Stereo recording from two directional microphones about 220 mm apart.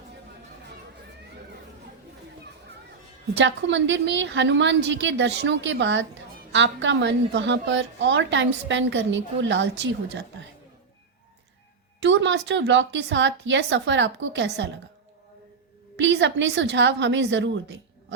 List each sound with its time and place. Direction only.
3.3 s a woman's voice: 55° right (ahead or behind)
12.0 s a woman's voice: 55° right (ahead or behind)
16.0 s a woman's voice: 55° right (ahead or behind)